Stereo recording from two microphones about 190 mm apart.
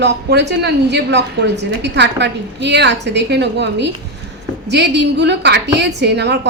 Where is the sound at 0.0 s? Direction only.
65° right (ahead or behind).